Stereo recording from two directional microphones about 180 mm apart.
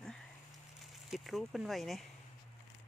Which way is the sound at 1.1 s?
Centre (ahead or behind).